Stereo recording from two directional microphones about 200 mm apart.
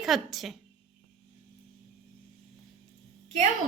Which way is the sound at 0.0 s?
Centre (ahead or behind).